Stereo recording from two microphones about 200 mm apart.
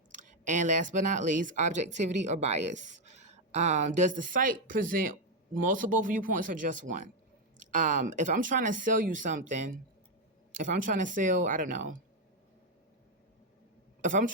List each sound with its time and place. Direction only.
0.1 s speech: 40° right (ahead or behind)
14.0 s speech: 40° right (ahead or behind)